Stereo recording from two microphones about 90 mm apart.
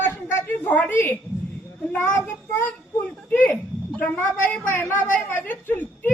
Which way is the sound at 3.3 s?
20° left (ahead or behind).